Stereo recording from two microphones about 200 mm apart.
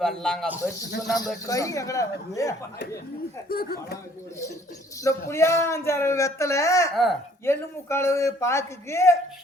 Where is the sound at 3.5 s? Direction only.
50° left (ahead or behind).